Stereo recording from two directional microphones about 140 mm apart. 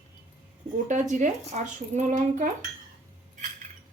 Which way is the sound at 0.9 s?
60° right (ahead or behind).